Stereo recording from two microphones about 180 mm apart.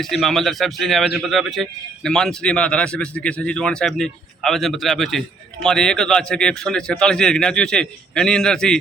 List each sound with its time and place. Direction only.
0.0 s a man's voice: centre (ahead or behind)